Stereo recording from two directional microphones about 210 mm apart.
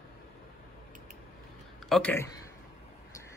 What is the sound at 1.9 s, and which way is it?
Speech, 5° left (ahead or behind).